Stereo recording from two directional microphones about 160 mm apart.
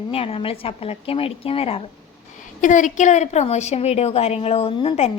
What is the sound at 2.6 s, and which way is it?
A woman's voice, 50° left (ahead or behind).